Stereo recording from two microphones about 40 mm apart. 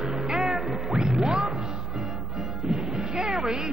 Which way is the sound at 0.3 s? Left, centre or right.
Centre.